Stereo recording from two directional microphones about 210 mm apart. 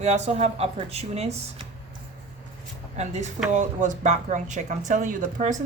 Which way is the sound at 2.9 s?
30° right (ahead or behind).